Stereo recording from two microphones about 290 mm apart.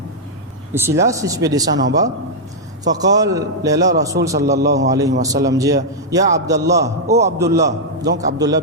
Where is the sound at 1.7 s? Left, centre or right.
Right.